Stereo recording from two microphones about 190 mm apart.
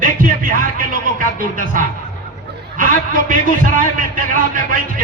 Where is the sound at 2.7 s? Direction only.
45° right (ahead or behind).